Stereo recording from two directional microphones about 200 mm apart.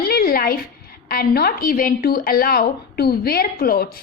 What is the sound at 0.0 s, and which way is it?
A woman's voice, 50° left (ahead or behind).